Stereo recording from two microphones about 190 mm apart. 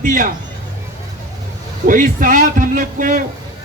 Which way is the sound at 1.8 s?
45° right (ahead or behind).